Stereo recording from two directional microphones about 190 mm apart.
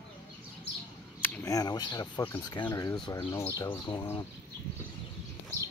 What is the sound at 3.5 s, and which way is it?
Speech, 15° left (ahead or behind).